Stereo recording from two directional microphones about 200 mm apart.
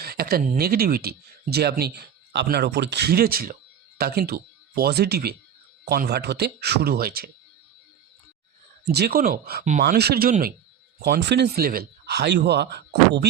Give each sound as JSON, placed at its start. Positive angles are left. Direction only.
{"t": 0.0, "sound": "speech", "side_deg": -50}
{"t": 8.8, "sound": "speech", "side_deg": -55}
{"t": 11.0, "sound": "speech", "side_deg": -60}